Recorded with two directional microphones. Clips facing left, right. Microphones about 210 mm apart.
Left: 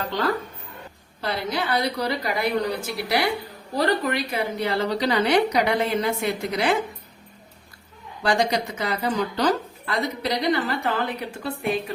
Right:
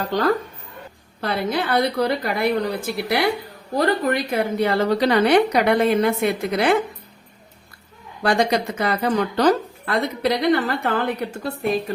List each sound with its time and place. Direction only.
0.1 s speech: 45° right (ahead or behind)
1.2 s a woman's voice: 55° right (ahead or behind)
8.2 s a woman's voice: 55° right (ahead or behind)
11.4 s a woman's voice: 40° right (ahead or behind)